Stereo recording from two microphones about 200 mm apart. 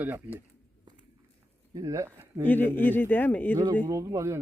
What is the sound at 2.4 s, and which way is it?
Speech, 10° left (ahead or behind).